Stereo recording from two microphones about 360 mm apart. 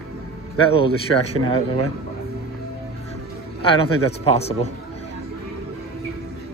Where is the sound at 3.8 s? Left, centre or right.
Centre.